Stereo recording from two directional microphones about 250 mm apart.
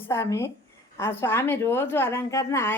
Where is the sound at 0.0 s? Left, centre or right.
Centre.